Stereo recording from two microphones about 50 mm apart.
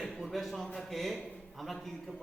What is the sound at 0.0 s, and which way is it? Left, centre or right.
A man's voice, centre.